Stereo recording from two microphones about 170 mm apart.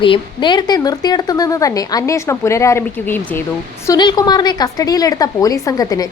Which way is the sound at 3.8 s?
25° left (ahead or behind).